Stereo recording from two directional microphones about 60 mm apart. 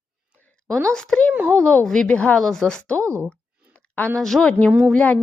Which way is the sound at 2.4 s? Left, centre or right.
Centre.